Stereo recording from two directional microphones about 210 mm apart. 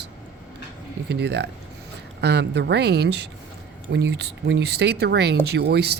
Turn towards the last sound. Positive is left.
turn(degrees=-50)  # may be behind; listen again after turning